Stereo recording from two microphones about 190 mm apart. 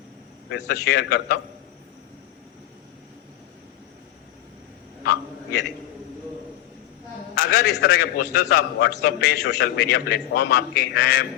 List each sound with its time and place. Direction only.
0.5 s a man's voice: 55° left (ahead or behind)
7.3 s a man's voice: 50° left (ahead or behind)